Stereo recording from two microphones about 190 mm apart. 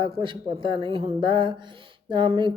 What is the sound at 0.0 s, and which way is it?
Speech, 25° right (ahead or behind).